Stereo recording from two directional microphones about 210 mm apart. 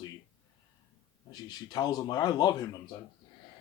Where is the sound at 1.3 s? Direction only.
20° left (ahead or behind).